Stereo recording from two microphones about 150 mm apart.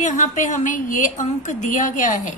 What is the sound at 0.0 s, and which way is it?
A woman's voice, 55° left (ahead or behind).